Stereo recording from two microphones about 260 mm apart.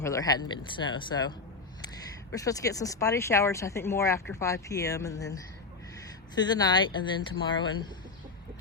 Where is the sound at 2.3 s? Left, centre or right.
Centre.